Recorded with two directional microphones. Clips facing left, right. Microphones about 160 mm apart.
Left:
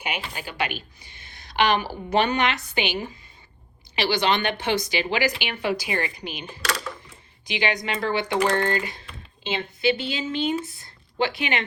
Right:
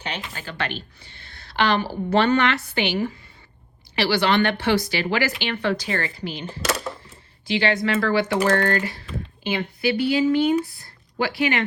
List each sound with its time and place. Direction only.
0.0 s a woman's voice: 15° left (ahead or behind)